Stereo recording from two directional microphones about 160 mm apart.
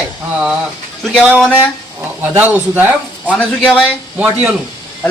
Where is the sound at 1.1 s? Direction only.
Centre (ahead or behind).